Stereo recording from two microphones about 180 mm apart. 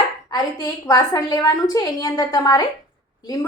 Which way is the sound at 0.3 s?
20° left (ahead or behind).